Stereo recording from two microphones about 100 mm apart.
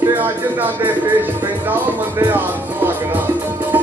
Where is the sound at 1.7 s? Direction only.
20° right (ahead or behind).